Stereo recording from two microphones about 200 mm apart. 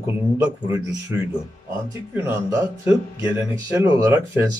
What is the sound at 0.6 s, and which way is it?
Speech, 15° right (ahead or behind).